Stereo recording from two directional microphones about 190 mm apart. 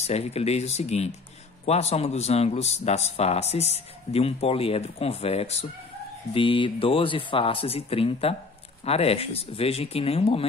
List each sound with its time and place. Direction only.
0.0 s speech: 35° left (ahead or behind)